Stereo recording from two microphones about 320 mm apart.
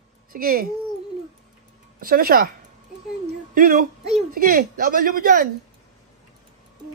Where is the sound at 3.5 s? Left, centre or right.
Right.